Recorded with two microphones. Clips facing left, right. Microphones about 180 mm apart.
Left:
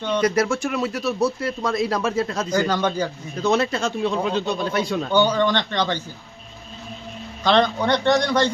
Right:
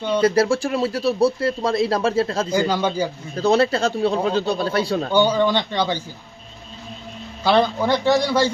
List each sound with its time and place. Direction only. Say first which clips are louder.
0.2 s speech: right 4 dB; 30° right (ahead or behind)
2.5 s a man's voice: right 1 dB; 10° right (ahead or behind)
3.3 s speech: right 3 dB; 35° right (ahead or behind)
5.1 s a man's voice: right 1 dB; 10° right (ahead or behind)
7.4 s a man's voice: right 1 dB; 5° right (ahead or behind)